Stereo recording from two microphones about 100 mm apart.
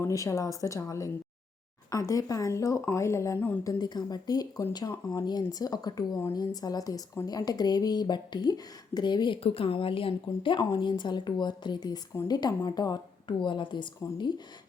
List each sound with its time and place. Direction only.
0.0 s a woman's voice: 30° left (ahead or behind); by 9.4 s 50° left (ahead or behind)
9.4 s a woman's voice: 65° left (ahead or behind); by 14.4 s 50° left (ahead or behind)